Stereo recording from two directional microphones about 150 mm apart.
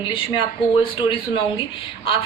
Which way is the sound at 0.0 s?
35° left (ahead or behind).